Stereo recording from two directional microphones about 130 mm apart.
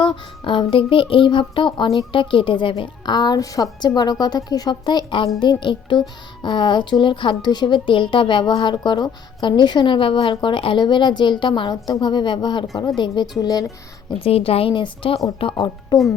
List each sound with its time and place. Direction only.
0.0 s a woman's voice: 40° left (ahead or behind)
14.2 s a woman's voice: 50° left (ahead or behind)
15.5 s speech: 30° left (ahead or behind)